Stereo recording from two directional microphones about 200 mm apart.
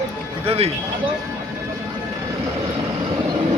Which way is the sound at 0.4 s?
30° right (ahead or behind).